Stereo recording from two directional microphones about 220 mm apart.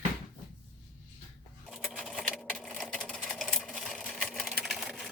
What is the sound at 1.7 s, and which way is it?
Sewing machine, 5° right (ahead or behind).